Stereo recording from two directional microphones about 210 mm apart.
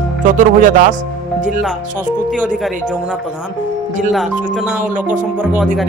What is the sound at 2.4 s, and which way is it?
Speech, 5° right (ahead or behind).